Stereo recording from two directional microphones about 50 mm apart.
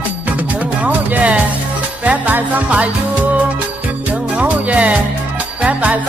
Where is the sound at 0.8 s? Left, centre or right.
Right.